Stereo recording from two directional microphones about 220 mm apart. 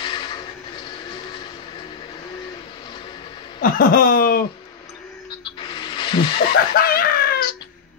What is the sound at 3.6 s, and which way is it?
Speech, 40° left (ahead or behind).